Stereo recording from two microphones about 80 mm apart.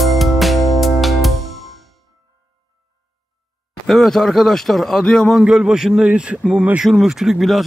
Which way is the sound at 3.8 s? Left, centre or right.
Centre.